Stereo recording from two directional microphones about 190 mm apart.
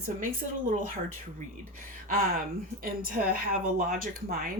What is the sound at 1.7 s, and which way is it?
Speech, 45° right (ahead or behind).